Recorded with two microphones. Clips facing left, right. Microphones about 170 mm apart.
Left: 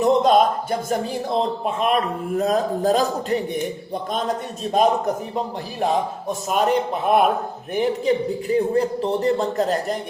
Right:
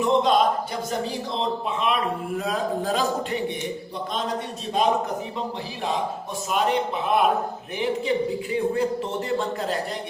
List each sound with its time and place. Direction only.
0.0 s speech: 45° left (ahead or behind)
4.7 s speech: 45° left (ahead or behind)